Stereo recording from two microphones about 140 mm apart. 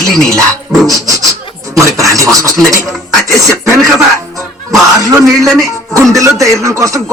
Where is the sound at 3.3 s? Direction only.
25° right (ahead or behind).